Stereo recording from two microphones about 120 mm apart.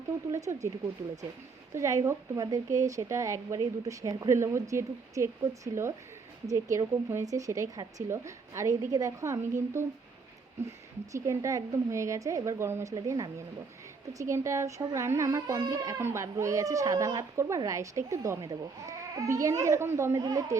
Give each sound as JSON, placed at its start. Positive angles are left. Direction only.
{"t": 0.3, "sound": "a child's voice", "side_deg": -25}
{"t": 1.7, "sound": "a child's voice", "side_deg": -25}